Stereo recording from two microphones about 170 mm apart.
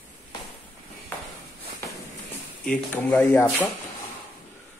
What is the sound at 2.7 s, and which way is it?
Speech, 10° left (ahead or behind).